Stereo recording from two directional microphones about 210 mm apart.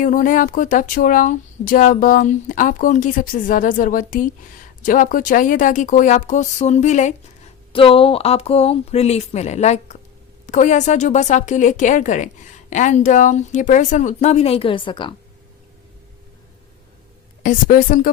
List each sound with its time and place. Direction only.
0.0 s speech: 40° left (ahead or behind); by 15.1 s 25° left (ahead or behind)
17.4 s speech: 40° left (ahead or behind)